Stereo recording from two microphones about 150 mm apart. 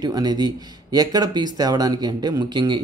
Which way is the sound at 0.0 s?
25° right (ahead or behind).